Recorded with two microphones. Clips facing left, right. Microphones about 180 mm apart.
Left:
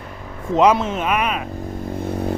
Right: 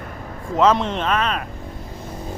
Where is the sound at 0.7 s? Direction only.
5° left (ahead or behind).